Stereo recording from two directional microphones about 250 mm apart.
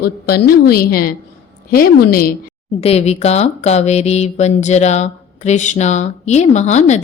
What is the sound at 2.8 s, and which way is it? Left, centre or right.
A woman's voice, left.